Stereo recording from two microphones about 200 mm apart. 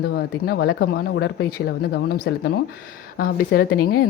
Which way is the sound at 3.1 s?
50° left (ahead or behind).